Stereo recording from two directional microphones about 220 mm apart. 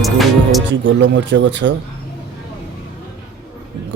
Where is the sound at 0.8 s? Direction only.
55° right (ahead or behind).